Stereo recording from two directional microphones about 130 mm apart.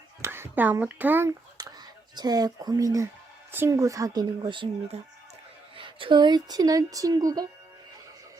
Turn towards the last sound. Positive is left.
turn(degrees=-30)  # may be behind; listen again after turning